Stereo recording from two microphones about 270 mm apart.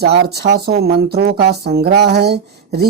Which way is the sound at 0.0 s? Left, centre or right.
Right.